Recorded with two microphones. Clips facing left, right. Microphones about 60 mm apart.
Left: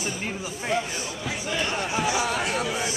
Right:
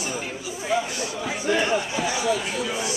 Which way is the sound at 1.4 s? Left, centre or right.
Centre.